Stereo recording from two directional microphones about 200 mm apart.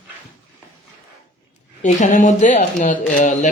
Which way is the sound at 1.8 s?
40° left (ahead or behind).